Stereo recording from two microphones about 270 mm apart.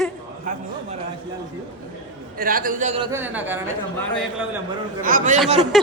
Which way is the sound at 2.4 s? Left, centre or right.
Right.